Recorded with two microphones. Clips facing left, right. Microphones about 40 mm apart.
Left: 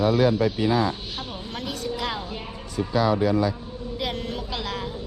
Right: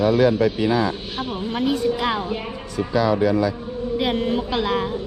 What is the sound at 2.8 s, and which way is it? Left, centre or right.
Speech, right.